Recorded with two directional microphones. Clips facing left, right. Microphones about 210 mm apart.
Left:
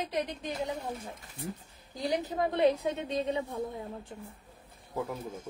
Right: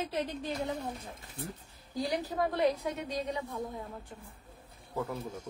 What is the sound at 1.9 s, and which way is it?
A woman's voice, 20° left (ahead or behind).